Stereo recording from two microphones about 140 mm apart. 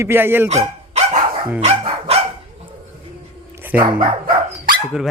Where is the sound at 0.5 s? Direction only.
50° right (ahead or behind).